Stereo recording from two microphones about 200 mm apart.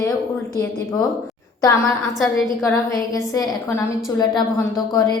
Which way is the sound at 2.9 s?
15° left (ahead or behind).